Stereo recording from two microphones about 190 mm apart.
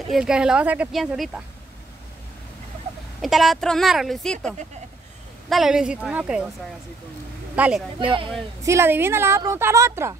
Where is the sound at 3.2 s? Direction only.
Centre (ahead or behind).